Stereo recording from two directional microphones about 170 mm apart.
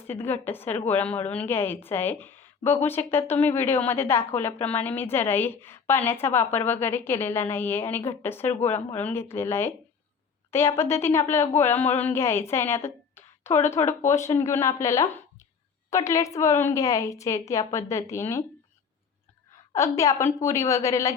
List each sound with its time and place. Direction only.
0.1 s a woman's voice: 10° left (ahead or behind)
19.7 s a woman's voice: 20° left (ahead or behind)